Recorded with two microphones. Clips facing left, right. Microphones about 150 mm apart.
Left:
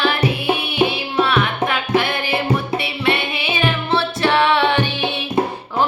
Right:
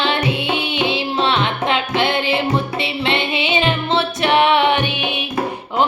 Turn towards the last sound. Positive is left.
turn(degrees=-15)  # may be behind; listen again after turning